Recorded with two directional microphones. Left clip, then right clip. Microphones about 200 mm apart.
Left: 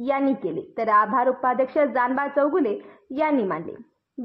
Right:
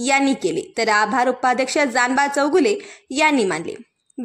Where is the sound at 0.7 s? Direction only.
45° right (ahead or behind).